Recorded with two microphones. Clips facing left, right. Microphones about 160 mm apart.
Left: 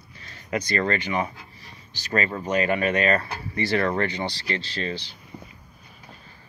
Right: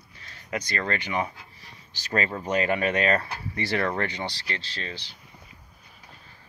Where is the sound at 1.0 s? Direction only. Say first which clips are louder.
Left 2 dB; 15° right (ahead or behind).